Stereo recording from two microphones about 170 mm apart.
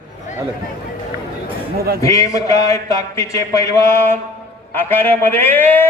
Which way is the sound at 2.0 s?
20° left (ahead or behind).